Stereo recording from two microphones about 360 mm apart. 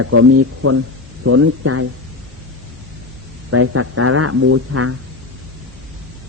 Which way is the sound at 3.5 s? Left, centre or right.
Right.